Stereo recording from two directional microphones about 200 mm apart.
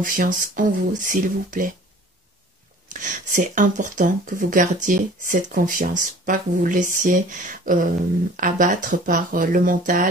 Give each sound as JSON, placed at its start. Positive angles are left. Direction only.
{"t": 0.0, "sound": "speech", "side_deg": -45}
{"t": 2.9, "sound": "speech", "side_deg": -40}